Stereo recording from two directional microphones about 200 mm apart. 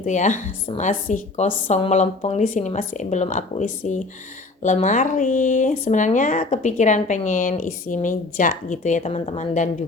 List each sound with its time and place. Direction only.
0.0 s speech: 40° left (ahead or behind)